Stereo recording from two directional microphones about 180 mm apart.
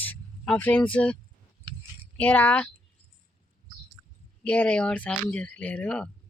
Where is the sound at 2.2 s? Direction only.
10° left (ahead or behind).